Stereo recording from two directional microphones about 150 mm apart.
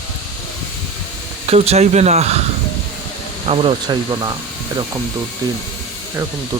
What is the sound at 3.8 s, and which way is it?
Speech, 25° right (ahead or behind).